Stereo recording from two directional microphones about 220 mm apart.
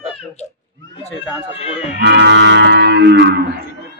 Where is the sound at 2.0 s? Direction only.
50° right (ahead or behind).